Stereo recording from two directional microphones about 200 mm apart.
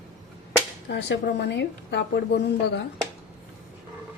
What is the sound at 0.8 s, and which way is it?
A woman's voice, 60° left (ahead or behind).